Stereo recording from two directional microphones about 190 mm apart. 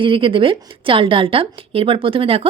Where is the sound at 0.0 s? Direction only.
25° right (ahead or behind).